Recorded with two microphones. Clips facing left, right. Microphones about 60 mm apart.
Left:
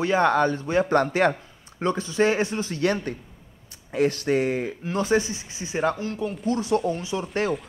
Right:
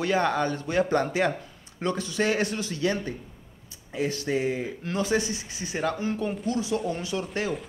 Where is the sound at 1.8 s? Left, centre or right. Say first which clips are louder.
Left 4 dB; left.